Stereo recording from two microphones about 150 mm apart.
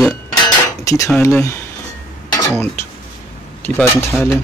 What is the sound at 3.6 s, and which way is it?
Speech, 15° left (ahead or behind).